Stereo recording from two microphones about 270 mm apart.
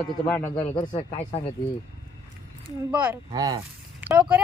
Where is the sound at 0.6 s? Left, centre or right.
Centre.